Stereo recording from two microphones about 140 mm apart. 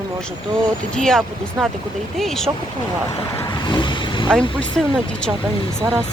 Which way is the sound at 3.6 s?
35° left (ahead or behind).